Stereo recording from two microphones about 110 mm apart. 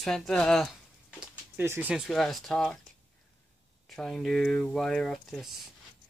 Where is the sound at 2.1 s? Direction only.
Centre (ahead or behind).